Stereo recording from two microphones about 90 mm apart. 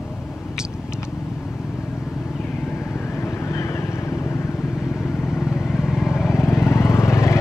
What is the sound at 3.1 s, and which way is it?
Vehicle, 30° left (ahead or behind).